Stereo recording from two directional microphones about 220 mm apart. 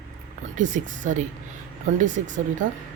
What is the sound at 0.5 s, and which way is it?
Speech, 35° right (ahead or behind).